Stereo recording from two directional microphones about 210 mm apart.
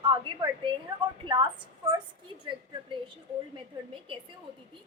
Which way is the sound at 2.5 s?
25° right (ahead or behind).